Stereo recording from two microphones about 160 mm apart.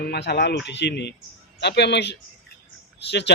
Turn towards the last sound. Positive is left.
turn(degrees=90)